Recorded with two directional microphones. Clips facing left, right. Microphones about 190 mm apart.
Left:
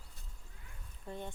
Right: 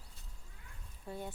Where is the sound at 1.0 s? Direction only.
5° right (ahead or behind).